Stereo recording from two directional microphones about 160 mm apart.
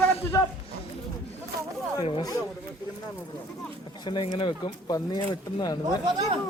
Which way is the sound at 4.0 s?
30° left (ahead or behind).